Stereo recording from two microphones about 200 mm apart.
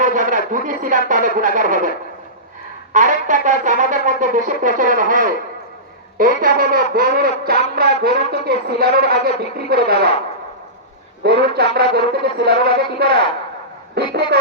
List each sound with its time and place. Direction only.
0.0 s speech: 40° right (ahead or behind)
2.9 s a sound: 40° right (ahead or behind)
6.1 s speech: 45° right (ahead or behind)
11.2 s a man's voice: 55° right (ahead or behind)